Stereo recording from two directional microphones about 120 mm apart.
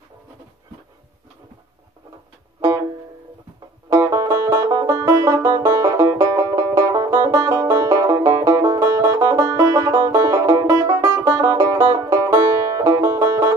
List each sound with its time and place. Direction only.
3.9 s banjo: 25° right (ahead or behind)